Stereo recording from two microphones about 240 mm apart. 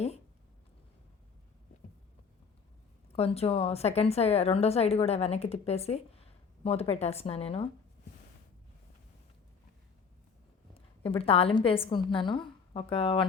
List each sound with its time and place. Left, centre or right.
3.2 s a woman's voice: left
10.8 s a woman's voice: left